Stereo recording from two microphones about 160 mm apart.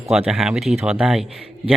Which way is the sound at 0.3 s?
5° right (ahead or behind).